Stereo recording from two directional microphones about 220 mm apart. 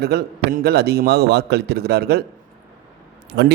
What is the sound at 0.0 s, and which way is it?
A man's voice, 45° right (ahead or behind).